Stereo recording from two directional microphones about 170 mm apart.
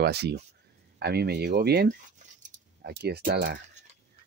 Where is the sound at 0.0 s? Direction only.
75° right (ahead or behind).